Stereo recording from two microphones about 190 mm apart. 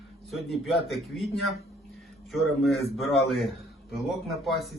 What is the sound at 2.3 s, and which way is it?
Speech, centre (ahead or behind).